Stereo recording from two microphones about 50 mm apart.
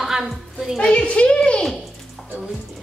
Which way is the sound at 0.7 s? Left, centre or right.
Left.